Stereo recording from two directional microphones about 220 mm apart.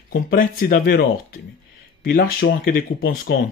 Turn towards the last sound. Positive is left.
turn(degrees=40)  # may be behind; listen again after turning